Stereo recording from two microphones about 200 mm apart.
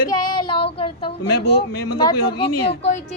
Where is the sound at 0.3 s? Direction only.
25° left (ahead or behind).